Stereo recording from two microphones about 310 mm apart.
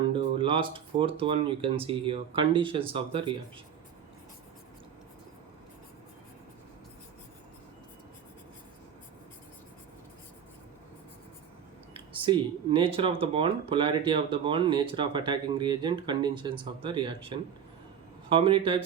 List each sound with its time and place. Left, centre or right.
0.1 s speech: centre
11.9 s speech: centre
18.3 s speech: centre